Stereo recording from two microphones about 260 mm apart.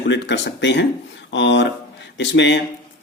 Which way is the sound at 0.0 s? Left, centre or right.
Left.